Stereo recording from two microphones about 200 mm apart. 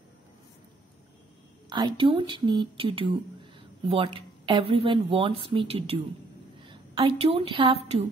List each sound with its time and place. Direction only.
1.7 s a woman's voice: 20° right (ahead or behind)